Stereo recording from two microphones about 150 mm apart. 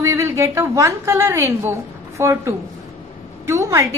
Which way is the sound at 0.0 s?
20° right (ahead or behind).